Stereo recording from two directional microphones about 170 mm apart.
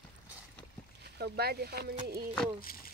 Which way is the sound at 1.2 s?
70° right (ahead or behind).